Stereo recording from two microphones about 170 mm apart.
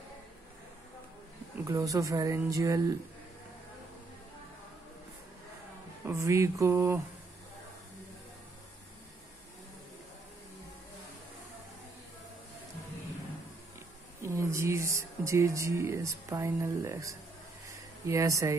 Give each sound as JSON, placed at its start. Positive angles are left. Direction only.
{"t": 1.6, "sound": "speech", "side_deg": -20}
{"t": 6.0, "sound": "speech", "side_deg": -15}
{"t": 14.2, "sound": "speech", "side_deg": -15}
{"t": 17.6, "sound": "a sound", "side_deg": -20}